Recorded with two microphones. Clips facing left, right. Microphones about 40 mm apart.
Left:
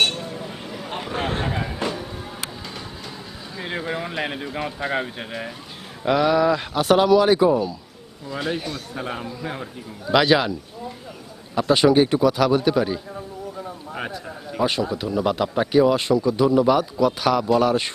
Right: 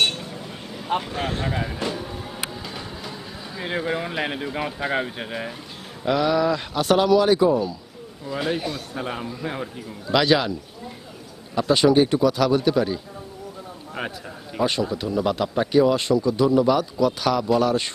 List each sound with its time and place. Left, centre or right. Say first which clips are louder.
0.0 s a sound: left 1 dB; centre
1.1 s speech: left 2 dB; left
1.5 s a sound: left 1 dB; centre
6.1 s a man's voice: left 2 dB; centre
8.3 s a man's voice: right 1 dB; centre
10.1 s a man's voice: left 2 dB; centre
11.5 s a man's voice: left 1 dB; centre
13.9 s a man's voice: right 1 dB; centre